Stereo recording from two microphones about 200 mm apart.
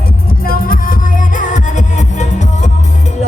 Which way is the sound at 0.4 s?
45° left (ahead or behind).